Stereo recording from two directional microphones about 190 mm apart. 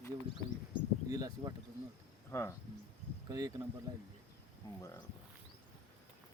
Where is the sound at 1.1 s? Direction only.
20° right (ahead or behind).